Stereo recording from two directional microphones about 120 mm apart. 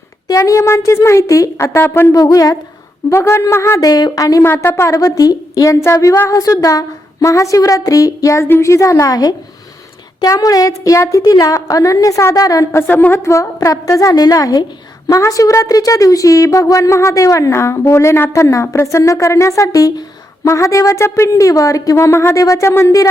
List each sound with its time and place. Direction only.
0.3 s a woman's voice: 25° left (ahead or behind)
2.1 s a woman's voice: 30° left (ahead or behind)
3.1 s a woman's voice: 20° left (ahead or behind)
12.9 s a woman's voice: 15° left (ahead or behind)